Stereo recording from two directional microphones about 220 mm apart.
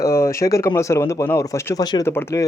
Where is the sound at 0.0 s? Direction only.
15° left (ahead or behind).